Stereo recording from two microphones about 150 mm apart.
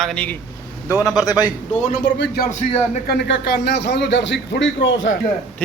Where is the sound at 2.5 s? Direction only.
55° left (ahead or behind).